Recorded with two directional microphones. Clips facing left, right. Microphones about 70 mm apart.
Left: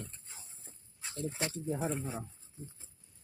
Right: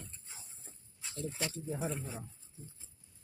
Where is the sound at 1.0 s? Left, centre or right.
Left.